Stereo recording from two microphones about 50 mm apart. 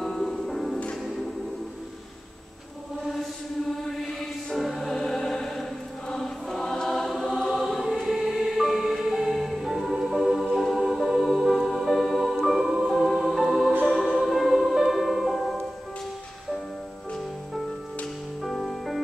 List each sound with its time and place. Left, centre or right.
0.0 s music: centre
3.8 s music: centre
7.2 s choir: centre
8.1 s music: centre
10.6 s music: centre
18.4 s music: centre